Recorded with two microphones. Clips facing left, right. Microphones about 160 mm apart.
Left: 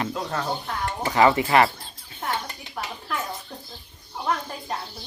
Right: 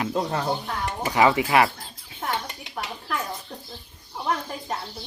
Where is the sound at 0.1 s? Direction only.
20° right (ahead or behind).